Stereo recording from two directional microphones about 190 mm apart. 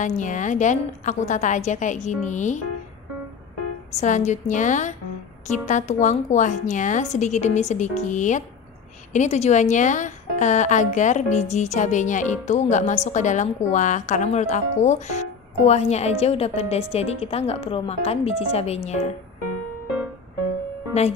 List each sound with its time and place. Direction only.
0.0 s a woman's voice: 40° left (ahead or behind)
4.0 s a woman's voice: 40° left (ahead or behind)